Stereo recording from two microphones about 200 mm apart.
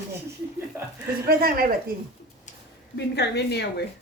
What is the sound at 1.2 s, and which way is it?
Speech, 45° right (ahead or behind).